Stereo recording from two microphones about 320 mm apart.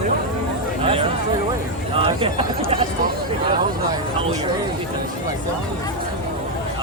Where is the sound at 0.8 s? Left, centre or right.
Centre.